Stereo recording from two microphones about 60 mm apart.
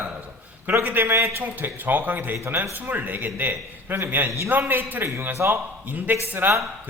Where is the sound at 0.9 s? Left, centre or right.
Right.